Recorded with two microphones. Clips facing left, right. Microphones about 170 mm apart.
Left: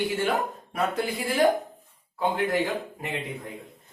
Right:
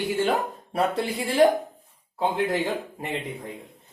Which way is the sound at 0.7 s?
30° right (ahead or behind).